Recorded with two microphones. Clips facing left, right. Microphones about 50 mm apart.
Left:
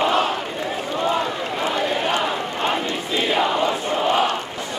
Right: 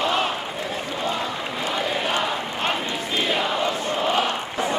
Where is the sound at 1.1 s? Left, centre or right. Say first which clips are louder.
Left 4 dB; centre.